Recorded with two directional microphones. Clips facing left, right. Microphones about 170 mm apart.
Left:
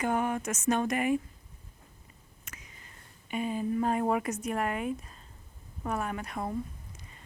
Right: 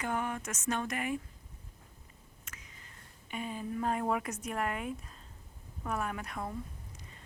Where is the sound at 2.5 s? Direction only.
15° left (ahead or behind).